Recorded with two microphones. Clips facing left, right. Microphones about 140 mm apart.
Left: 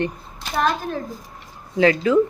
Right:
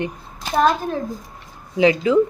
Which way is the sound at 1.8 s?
15° right (ahead or behind).